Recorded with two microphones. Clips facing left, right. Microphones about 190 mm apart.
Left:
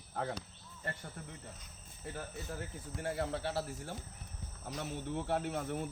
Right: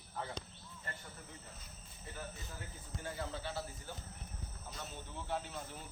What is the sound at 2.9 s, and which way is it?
Speech, 70° left (ahead or behind).